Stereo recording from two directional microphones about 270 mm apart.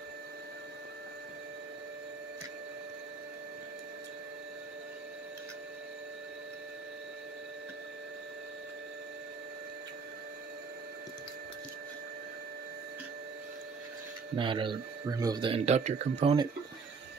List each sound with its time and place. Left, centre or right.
14.3 s speech: centre